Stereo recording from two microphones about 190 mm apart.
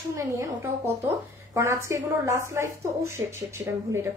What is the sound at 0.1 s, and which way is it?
Speech, 15° right (ahead or behind).